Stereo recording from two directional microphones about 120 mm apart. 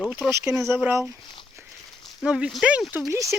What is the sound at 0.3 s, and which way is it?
Speech, 25° right (ahead or behind).